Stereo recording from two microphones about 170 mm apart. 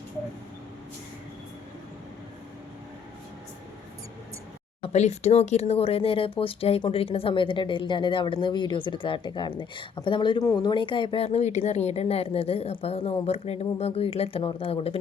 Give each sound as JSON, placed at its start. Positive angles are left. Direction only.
{"t": 4.8, "sound": "speech", "side_deg": 40}